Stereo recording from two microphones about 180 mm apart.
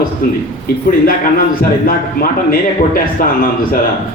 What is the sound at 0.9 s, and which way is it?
A man's voice, 55° left (ahead or behind).